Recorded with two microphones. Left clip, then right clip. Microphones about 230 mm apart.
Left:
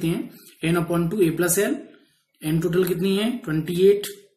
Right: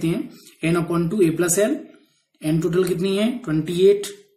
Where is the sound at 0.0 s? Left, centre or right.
Centre.